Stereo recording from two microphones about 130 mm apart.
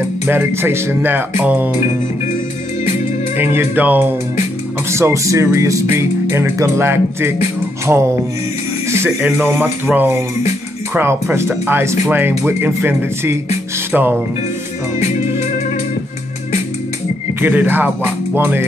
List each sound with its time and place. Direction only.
0.3 s speech: 15° right (ahead or behind)
3.3 s speech: 15° right (ahead or behind)
15.0 s music: 65° left (ahead or behind)
17.4 s speech: 15° right (ahead or behind)